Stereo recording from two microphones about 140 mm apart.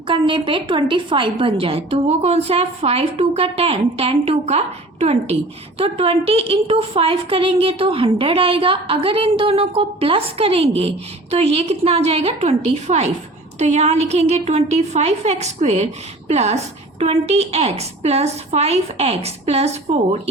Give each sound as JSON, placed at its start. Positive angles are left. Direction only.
{"t": 0.1, "sound": "a woman's voice", "side_deg": -40}